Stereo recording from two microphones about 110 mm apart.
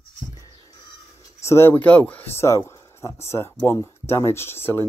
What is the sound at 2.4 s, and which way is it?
Speech, 25° left (ahead or behind).